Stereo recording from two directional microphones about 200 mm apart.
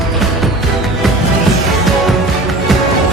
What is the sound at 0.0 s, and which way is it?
Music, centre (ahead or behind).